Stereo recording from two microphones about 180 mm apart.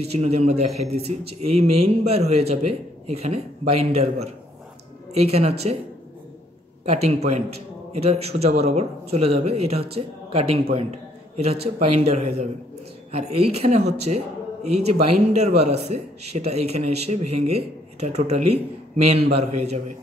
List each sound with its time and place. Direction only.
0.0 s a man's voice: 35° right (ahead or behind)
6.9 s a man's voice: 35° right (ahead or behind)